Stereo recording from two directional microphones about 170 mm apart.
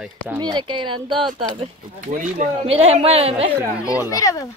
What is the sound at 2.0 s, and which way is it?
Speech, 45° right (ahead or behind).